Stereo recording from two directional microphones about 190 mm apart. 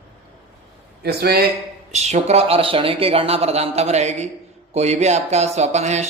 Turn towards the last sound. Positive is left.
turn(degrees=-35)  # may be behind; listen again after turning